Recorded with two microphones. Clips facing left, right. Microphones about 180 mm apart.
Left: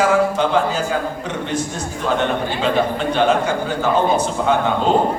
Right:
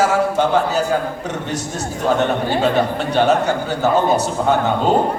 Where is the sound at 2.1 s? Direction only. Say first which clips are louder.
Right 2 dB; 45° right (ahead or behind).